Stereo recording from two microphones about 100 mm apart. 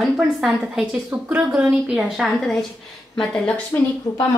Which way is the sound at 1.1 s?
15° right (ahead or behind).